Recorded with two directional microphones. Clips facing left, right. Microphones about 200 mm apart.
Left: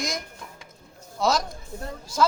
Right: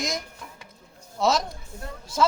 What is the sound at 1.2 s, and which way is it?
Speech, centre (ahead or behind).